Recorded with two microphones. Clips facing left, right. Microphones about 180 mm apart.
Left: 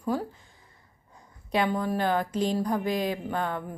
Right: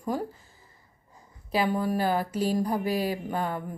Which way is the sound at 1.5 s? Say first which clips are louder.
Even; 5° right (ahead or behind).